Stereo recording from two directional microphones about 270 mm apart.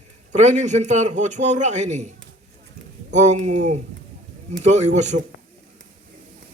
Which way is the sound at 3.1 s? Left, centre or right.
Right.